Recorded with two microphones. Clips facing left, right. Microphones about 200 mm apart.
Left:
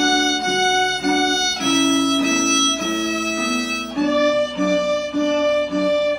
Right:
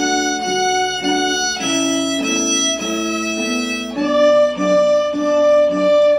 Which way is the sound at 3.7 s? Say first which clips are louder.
Right 2 dB; 20° right (ahead or behind).